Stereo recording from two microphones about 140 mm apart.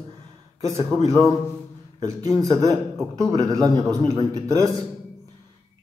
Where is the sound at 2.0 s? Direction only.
25° right (ahead or behind).